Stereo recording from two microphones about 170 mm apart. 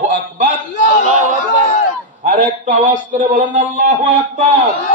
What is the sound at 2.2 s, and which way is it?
A man's voice, 50° right (ahead or behind).